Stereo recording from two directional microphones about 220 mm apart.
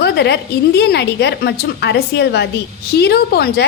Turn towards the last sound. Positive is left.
turn(degrees=45)  # may be behind; listen again after turning